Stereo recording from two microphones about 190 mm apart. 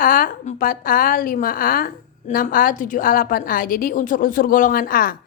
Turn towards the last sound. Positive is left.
turn(degrees=50)  # may be behind; listen again after turning